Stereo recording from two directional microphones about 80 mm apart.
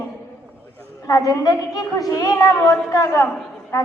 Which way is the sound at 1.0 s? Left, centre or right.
Left.